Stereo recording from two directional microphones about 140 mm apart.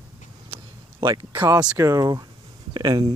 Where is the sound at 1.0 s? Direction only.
35° right (ahead or behind).